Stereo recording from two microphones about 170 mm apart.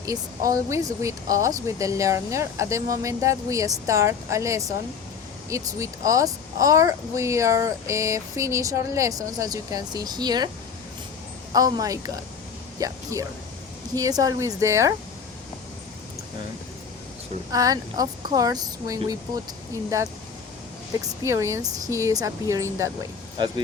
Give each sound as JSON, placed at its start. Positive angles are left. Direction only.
{"t": 0.0, "sound": "speech", "side_deg": -20}
{"t": 11.5, "sound": "speech", "side_deg": -20}
{"t": 17.5, "sound": "speech", "side_deg": -20}
{"t": 21.2, "sound": "speech", "side_deg": -15}